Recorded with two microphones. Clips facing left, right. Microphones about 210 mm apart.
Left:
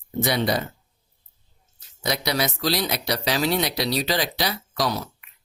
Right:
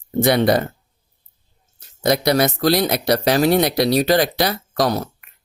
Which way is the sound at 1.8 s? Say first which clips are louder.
Right 9 dB; 50° right (ahead or behind).